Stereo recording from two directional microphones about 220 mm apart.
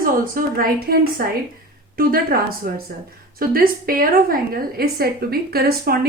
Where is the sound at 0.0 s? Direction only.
40° right (ahead or behind).